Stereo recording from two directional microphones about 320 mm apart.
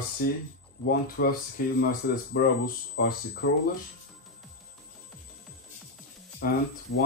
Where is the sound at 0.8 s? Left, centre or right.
Left.